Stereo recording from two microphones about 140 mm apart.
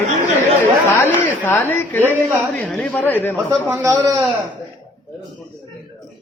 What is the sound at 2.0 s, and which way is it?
Speech, 15° right (ahead or behind).